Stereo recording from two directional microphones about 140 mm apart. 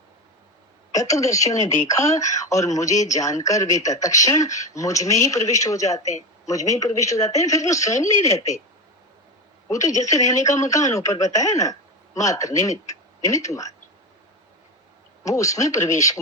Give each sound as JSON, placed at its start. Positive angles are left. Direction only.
{"t": 0.9, "sound": "speech", "side_deg": 25}
{"t": 9.6, "sound": "a woman's voice", "side_deg": 20}
{"t": 15.2, "sound": "speech", "side_deg": 25}